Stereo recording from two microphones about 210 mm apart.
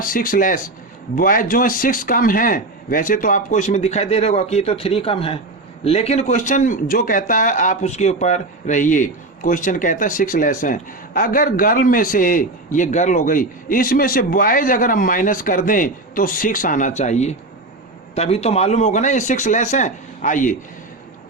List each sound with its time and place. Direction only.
0.0 s speech: 40° left (ahead or behind)